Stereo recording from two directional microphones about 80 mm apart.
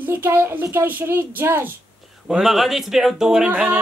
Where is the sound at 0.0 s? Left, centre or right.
Right.